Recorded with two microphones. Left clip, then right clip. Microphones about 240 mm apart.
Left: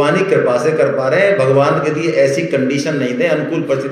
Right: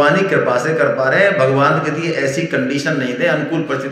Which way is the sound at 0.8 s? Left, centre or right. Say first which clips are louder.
Even; centre.